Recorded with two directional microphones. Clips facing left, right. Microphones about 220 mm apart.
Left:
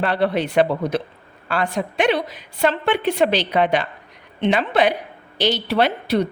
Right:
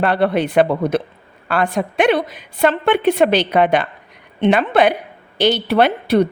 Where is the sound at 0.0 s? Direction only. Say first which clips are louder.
Right 3 dB; 55° right (ahead or behind).